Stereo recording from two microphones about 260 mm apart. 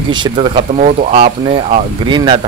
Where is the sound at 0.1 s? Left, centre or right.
Centre.